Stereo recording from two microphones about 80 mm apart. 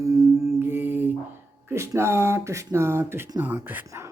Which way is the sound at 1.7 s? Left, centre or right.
Right.